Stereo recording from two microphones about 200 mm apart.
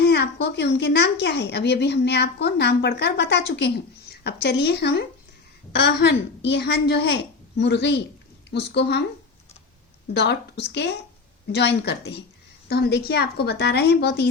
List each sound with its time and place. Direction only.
0.0 s a woman's voice: 55° left (ahead or behind)
10.2 s a woman's voice: 55° left (ahead or behind)